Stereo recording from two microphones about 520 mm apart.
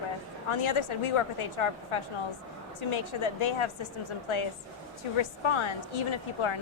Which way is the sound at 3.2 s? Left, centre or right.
Left.